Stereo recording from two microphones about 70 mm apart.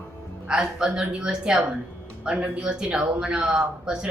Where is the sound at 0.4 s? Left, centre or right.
Centre.